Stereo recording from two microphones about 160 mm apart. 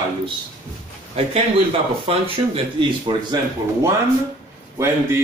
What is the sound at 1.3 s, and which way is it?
Speech, 35° right (ahead or behind).